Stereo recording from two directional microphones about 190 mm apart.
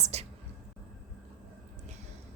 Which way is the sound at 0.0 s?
35° right (ahead or behind).